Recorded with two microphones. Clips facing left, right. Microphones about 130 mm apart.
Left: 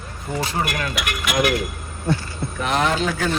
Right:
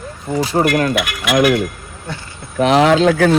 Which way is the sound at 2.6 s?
90° right.